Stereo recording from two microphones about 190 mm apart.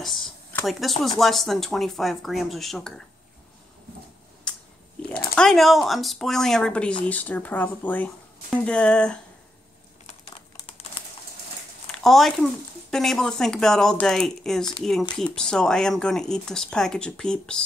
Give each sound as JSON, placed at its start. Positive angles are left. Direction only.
{"t": 0.0, "sound": "a sound", "side_deg": 0}
{"t": 0.7, "sound": "speech", "side_deg": 0}
{"t": 4.5, "sound": "a sound", "side_deg": 5}
{"t": 5.3, "sound": "speech", "side_deg": 5}
{"t": 10.2, "sound": "crumpling", "side_deg": 30}
{"t": 11.9, "sound": "speech", "side_deg": 0}